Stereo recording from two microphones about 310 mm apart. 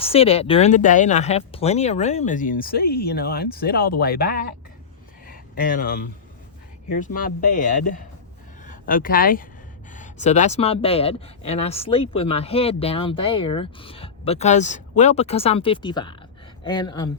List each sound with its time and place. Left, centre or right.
0.0 s speech: centre
5.2 s a sound: left
6.9 s speech: left